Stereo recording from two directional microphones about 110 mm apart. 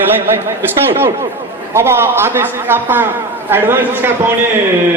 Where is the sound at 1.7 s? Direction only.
20° right (ahead or behind).